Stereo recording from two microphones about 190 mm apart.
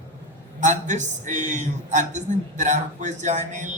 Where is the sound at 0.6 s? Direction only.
40° right (ahead or behind).